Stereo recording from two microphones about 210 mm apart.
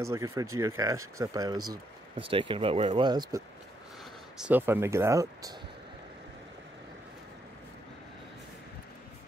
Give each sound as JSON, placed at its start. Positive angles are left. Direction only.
{"t": 0.0, "sound": "speech", "side_deg": -15}